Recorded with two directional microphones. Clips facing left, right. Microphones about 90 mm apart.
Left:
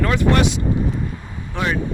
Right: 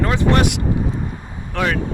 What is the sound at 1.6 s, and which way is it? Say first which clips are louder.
Speech: right 2 dB; 90° right.